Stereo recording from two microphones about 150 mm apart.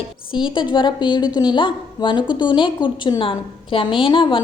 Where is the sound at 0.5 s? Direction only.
30° left (ahead or behind).